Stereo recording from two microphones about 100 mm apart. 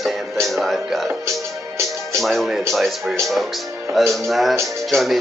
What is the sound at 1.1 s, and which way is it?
Music, 30° right (ahead or behind).